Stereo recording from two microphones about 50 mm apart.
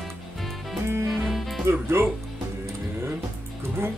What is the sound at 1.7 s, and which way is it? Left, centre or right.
Music, right.